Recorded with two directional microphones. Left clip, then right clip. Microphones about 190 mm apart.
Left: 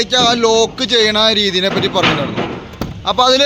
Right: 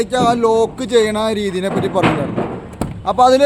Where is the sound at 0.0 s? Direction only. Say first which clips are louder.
Left 2 dB; 10° right (ahead or behind).